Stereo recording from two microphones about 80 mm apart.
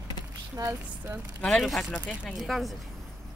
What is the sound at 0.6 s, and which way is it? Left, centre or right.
Speech, right.